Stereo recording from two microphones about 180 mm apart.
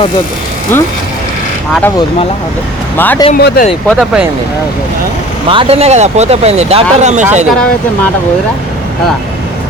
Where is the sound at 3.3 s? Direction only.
60° left (ahead or behind).